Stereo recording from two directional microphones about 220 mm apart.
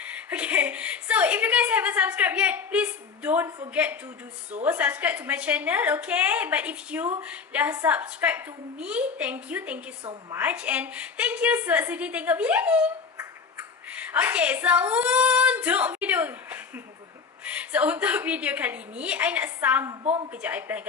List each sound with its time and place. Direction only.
0.0 s a woman's voice: 5° right (ahead or behind)
20.0 s a woman's voice: 25° right (ahead or behind)
20.4 s a woman's voice: 5° right (ahead or behind)